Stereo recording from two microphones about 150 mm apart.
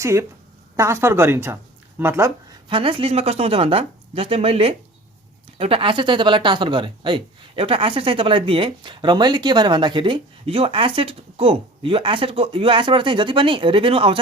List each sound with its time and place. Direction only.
0.0 s a woman's voice: 20° right (ahead or behind)
2.6 s speech: 35° right (ahead or behind)